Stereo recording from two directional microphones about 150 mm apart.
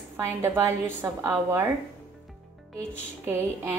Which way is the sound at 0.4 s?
15° right (ahead or behind).